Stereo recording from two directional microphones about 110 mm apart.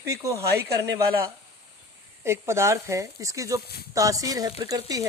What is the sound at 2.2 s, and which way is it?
Speech, 25° right (ahead or behind).